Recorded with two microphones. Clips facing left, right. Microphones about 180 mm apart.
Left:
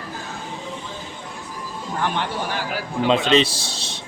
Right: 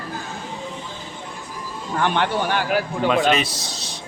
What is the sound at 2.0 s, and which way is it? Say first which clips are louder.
Speech: right 4 dB; 70° right (ahead or behind).